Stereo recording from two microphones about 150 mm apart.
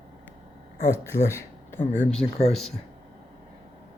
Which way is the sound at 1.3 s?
15° left (ahead or behind).